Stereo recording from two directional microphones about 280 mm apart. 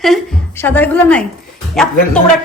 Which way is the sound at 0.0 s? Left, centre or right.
Centre.